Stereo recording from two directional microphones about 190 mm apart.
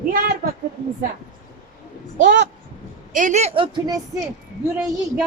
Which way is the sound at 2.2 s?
65° right (ahead or behind).